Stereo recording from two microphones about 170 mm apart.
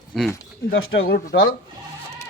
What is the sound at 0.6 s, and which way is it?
Speech, 65° left (ahead or behind).